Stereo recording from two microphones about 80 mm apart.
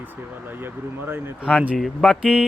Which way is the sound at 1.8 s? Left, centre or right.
Centre.